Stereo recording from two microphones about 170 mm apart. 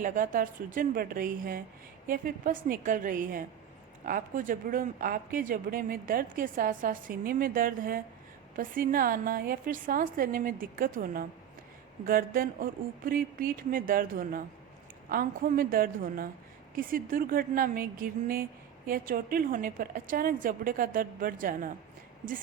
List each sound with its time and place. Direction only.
0.0 s a woman's voice: 50° right (ahead or behind)